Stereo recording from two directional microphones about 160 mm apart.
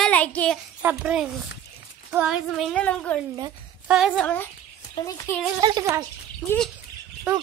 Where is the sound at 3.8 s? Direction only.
5° right (ahead or behind).